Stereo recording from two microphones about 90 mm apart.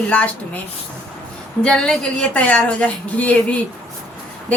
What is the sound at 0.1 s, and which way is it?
Speech, 15° left (ahead or behind).